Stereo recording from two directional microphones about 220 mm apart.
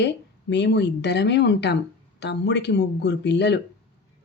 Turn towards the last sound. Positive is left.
turn(degrees=50)  # may be behind; listen again after turning